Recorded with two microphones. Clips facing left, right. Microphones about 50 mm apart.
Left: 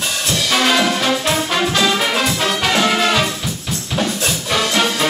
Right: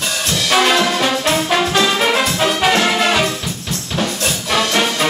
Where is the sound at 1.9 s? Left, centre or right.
Centre.